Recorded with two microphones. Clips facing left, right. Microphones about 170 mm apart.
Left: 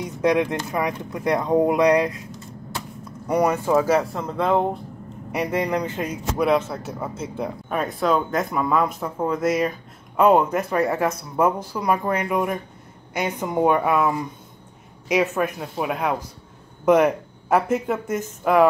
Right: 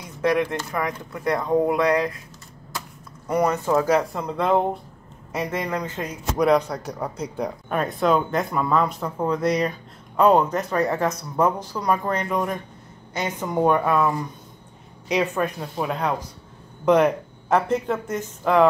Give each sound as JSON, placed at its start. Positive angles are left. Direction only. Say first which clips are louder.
{"t": 0.0, "sound": "speech", "louder": "left 2 dB", "side_deg": 20}
{"t": 3.3, "sound": "speech", "louder": "left 1 dB", "side_deg": 10}
{"t": 5.3, "sound": "speech", "louder": "left 3 dB", "side_deg": 10}